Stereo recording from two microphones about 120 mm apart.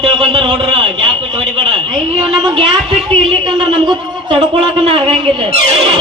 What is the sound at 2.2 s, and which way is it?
Speech, 50° right (ahead or behind).